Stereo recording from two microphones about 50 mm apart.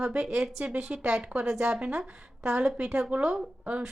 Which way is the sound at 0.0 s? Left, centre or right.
Right.